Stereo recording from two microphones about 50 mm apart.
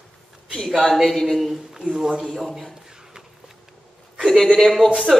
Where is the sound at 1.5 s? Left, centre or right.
Centre.